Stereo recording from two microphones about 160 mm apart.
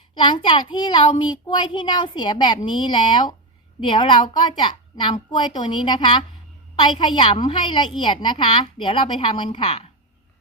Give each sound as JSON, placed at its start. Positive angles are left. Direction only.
{"t": 0.1, "sound": "a child's voice", "side_deg": 30}